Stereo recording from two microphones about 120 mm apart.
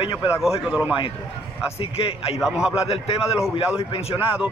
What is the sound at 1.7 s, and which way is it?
Speech, 55° left (ahead or behind).